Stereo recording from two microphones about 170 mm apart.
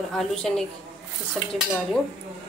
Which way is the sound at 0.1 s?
5° left (ahead or behind).